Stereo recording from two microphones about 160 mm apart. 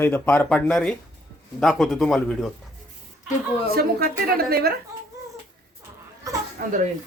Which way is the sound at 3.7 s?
70° right (ahead or behind).